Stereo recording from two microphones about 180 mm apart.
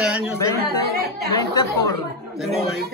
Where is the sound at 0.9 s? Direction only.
60° right (ahead or behind).